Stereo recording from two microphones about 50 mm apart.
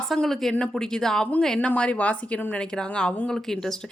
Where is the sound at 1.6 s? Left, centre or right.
Left.